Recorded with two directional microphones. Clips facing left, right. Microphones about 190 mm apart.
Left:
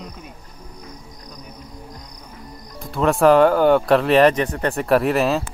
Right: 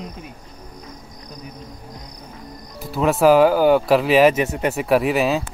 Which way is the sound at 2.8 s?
5° right (ahead or behind).